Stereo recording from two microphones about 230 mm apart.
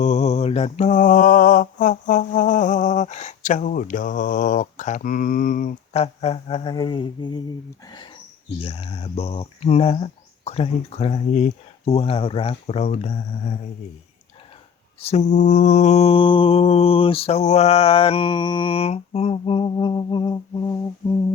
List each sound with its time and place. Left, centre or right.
0.0 s mantra: left
8.5 s mantra: left
15.0 s mantra: left